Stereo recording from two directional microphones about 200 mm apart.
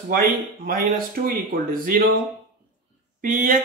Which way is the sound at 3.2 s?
45° right (ahead or behind).